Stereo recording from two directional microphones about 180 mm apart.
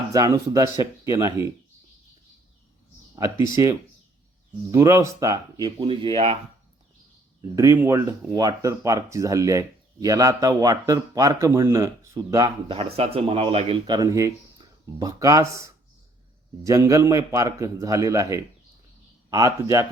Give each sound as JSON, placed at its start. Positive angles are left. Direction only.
{"t": 0.1, "sound": "speech", "side_deg": -20}
{"t": 3.2, "sound": "speech", "side_deg": -20}
{"t": 4.7, "sound": "speech", "side_deg": -15}
{"t": 7.5, "sound": "speech", "side_deg": -15}
{"t": 12.7, "sound": "speech", "side_deg": -35}